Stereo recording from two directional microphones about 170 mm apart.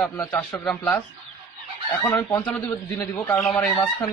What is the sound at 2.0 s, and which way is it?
Speech, 10° left (ahead or behind).